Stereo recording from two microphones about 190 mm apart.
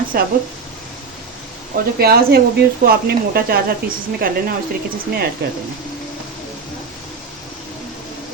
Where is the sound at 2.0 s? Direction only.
55° right (ahead or behind).